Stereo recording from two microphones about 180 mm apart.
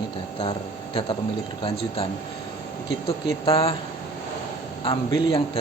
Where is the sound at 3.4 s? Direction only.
30° left (ahead or behind).